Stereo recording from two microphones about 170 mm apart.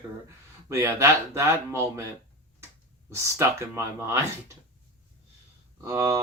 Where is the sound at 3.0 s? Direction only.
15° right (ahead or behind).